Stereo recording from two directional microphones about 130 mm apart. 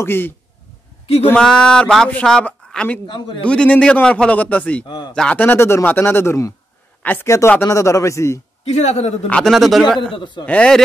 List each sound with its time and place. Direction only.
0.0 s speech: 15° left (ahead or behind)
1.4 s a man's voice: 5° left (ahead or behind); by 8.4 s 25° left (ahead or behind)
8.6 s a man's voice: 55° left (ahead or behind)
9.3 s speech: centre (ahead or behind)
10.1 s a man's voice: 40° left (ahead or behind)
10.4 s speech: 10° left (ahead or behind)